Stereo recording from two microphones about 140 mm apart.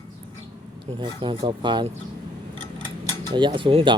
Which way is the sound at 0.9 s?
40° right (ahead or behind).